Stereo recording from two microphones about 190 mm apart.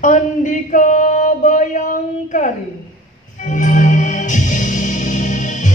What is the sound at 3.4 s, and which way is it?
Music, 40° left (ahead or behind).